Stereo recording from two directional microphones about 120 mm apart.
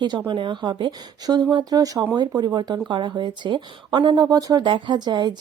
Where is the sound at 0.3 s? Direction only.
40° right (ahead or behind).